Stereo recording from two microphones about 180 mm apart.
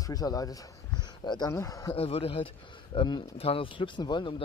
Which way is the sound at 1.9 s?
30° left (ahead or behind).